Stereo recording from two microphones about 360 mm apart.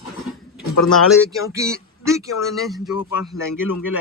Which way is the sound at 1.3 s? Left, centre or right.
Centre.